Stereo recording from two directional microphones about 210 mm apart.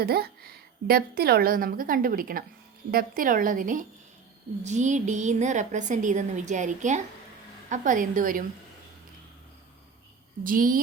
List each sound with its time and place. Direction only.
0.0 s a woman's voice: 50° right (ahead or behind)
10.4 s a woman's voice: 40° right (ahead or behind)